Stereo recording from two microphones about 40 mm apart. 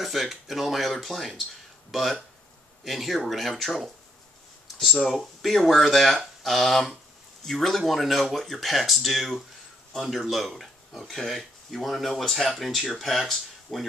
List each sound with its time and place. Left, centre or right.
0.0 s speech: centre